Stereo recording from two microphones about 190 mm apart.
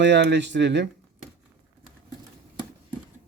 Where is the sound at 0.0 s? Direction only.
65° right (ahead or behind).